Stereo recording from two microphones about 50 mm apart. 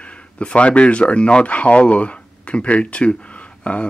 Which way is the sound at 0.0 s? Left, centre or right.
Left.